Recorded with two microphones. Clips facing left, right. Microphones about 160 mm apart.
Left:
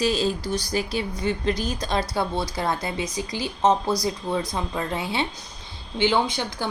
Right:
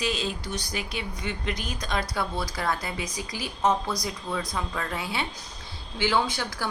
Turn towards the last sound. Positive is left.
turn(degrees=20)  # may be behind; listen again after turning